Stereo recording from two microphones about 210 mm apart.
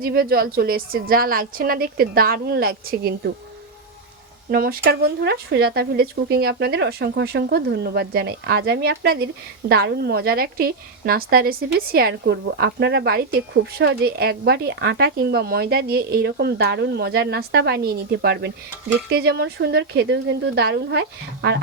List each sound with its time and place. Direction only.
0.0 s speech: 45° right (ahead or behind)
4.5 s speech: 45° right (ahead or behind)